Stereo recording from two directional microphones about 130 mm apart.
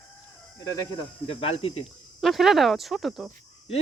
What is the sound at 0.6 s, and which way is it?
A man's voice, 30° left (ahead or behind).